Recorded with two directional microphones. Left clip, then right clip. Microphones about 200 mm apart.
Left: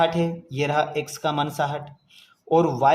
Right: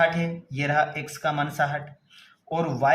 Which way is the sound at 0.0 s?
25° left (ahead or behind).